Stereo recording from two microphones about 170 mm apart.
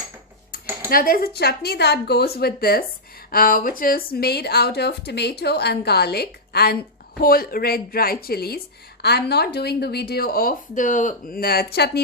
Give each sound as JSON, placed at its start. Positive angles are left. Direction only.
{"t": 0.9, "sound": "speech", "side_deg": 55}